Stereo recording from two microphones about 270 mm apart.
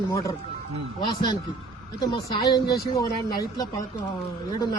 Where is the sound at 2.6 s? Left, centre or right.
Left.